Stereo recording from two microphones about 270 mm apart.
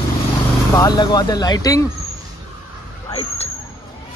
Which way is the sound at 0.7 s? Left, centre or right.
Centre.